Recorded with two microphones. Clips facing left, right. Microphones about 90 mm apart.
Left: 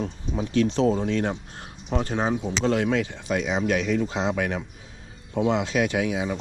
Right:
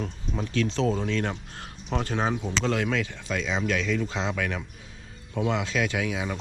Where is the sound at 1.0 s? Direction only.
40° left (ahead or behind).